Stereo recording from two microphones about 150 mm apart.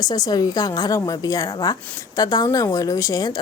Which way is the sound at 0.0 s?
25° left (ahead or behind).